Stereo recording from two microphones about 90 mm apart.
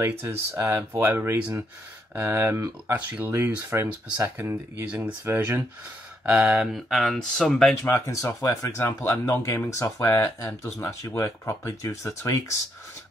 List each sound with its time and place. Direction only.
0.0 s speech: 25° right (ahead or behind)
6.2 s speech: 5° right (ahead or behind)
7.8 s speech: 30° left (ahead or behind)